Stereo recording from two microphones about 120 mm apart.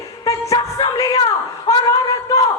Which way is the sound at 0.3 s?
30° left (ahead or behind).